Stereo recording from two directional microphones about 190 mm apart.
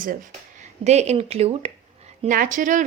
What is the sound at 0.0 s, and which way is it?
Speech, 45° right (ahead or behind).